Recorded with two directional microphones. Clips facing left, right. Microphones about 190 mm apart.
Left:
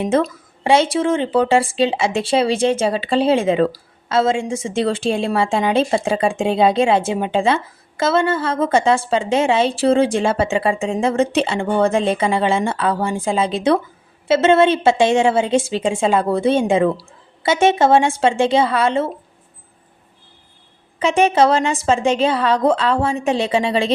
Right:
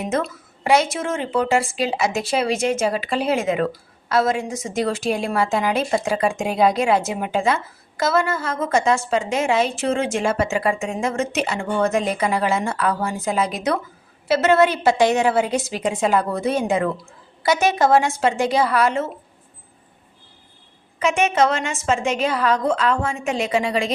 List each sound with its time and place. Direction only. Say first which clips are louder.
0.0 s a woman's voice: left 6 dB; 30° left (ahead or behind)
21.0 s a woman's voice: left 4 dB; 30° left (ahead or behind)